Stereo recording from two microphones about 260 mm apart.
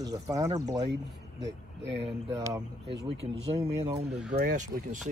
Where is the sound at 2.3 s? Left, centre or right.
Centre.